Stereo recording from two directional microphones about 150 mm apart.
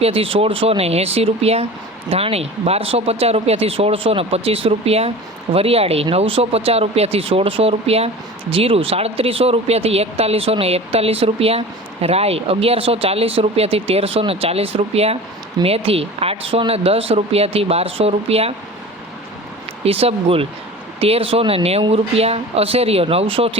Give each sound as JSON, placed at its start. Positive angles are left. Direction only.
{"t": 0.0, "sound": "speech", "side_deg": -40}
{"t": 19.8, "sound": "speech", "side_deg": -40}